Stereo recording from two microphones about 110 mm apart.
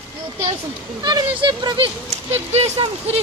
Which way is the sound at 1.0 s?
40° right (ahead or behind).